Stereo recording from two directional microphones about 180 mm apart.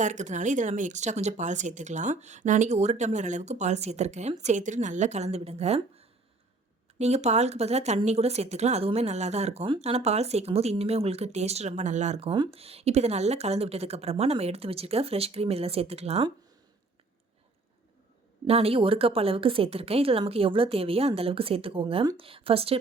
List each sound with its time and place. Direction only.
0.0 s speech: 40° right (ahead or behind)
12.3 s speech: 30° right (ahead or behind)
18.4 s speech: 35° right (ahead or behind)